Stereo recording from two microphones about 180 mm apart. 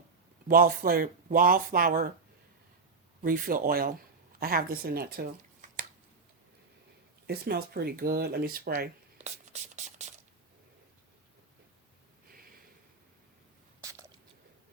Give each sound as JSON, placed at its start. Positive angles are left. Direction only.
{"t": 0.4, "sound": "speech", "side_deg": -50}
{"t": 3.2, "sound": "speech", "side_deg": -50}
{"t": 7.3, "sound": "speech", "side_deg": -55}
{"t": 9.1, "sound": "whispering", "side_deg": -40}
{"t": 13.8, "sound": "squish", "side_deg": -20}